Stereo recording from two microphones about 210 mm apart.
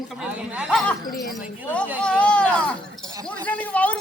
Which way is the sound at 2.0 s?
5° left (ahead or behind).